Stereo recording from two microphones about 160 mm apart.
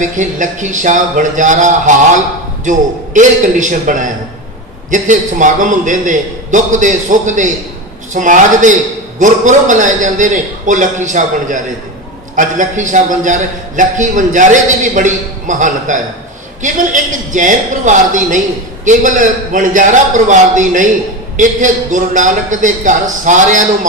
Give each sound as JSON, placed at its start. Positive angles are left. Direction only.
{"t": 0.0, "sound": "a man's voice", "side_deg": -50}